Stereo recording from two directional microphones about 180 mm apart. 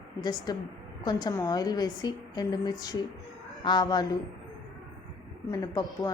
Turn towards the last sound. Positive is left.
turn(degrees=20)  # may be behind; listen again after turning